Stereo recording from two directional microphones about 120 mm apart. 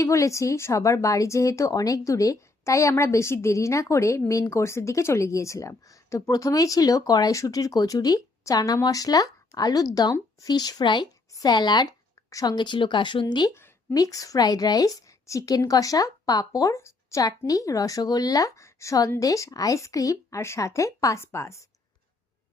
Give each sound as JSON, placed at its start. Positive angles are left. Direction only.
{"t": 0.0, "sound": "speech", "side_deg": 25}